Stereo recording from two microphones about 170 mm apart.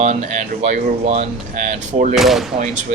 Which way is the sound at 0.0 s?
45° right (ahead or behind).